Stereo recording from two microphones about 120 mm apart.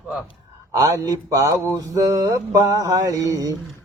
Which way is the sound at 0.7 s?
30° right (ahead or behind).